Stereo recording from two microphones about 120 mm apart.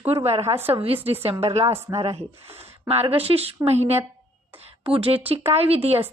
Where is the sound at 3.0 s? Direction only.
50° right (ahead or behind).